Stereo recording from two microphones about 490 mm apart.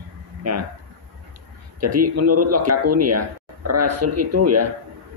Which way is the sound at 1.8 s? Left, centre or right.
Right.